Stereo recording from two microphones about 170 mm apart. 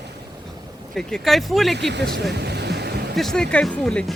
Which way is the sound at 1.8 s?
85° right.